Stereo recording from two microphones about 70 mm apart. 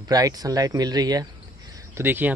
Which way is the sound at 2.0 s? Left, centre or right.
Right.